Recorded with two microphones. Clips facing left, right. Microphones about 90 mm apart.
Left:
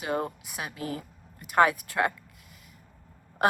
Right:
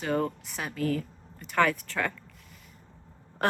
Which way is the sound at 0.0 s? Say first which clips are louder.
Right 2 dB; 10° left (ahead or behind).